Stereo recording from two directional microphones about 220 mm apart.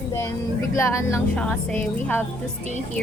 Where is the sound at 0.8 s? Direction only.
10° left (ahead or behind).